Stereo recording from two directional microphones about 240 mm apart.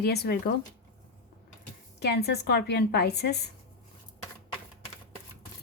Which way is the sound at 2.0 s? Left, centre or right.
Left.